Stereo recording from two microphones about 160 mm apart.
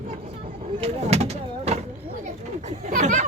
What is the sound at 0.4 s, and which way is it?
Vehicle, 45° right (ahead or behind).